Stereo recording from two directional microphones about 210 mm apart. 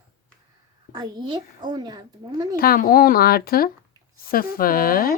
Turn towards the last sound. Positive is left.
turn(degrees=45)  # may be behind; listen again after turning